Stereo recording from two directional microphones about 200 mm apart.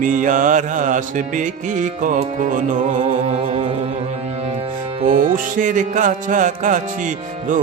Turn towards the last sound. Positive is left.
turn(degrees=-40)  # may be behind; listen again after turning